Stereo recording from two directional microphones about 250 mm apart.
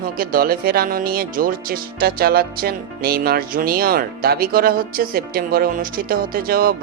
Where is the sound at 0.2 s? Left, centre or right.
Right.